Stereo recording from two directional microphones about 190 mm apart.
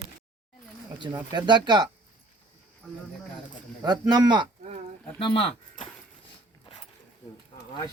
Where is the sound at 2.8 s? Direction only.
5° left (ahead or behind).